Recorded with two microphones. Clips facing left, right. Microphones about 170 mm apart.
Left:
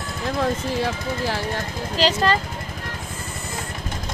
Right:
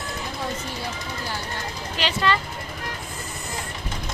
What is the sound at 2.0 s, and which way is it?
Speech, 40° left (ahead or behind).